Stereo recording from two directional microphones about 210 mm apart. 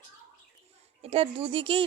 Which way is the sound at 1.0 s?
25° right (ahead or behind).